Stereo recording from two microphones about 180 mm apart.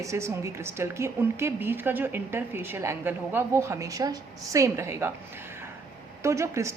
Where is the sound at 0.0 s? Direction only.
15° right (ahead or behind).